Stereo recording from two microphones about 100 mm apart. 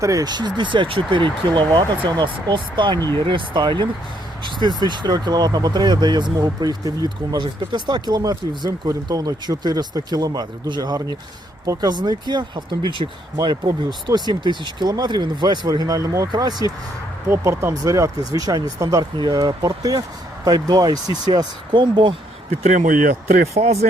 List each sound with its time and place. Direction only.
0.0 s speech: 35° right (ahead or behind)
17.2 s speech: 25° right (ahead or behind)
19.1 s speech: 45° right (ahead or behind)
23.6 s speech: 90° right